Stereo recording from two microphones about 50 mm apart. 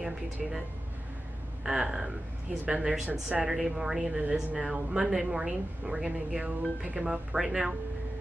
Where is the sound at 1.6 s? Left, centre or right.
Centre.